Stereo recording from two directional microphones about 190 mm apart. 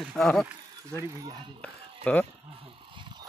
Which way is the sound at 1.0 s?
15° right (ahead or behind).